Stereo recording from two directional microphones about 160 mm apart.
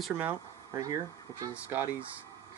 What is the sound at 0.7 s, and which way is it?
Speech, 20° right (ahead or behind).